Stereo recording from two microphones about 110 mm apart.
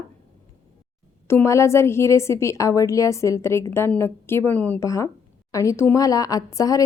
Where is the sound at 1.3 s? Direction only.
25° left (ahead or behind).